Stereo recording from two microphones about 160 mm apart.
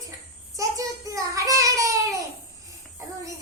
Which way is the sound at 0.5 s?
20° right (ahead or behind).